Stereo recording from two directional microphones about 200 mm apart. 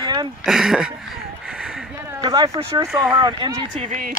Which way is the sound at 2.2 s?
20° right (ahead or behind).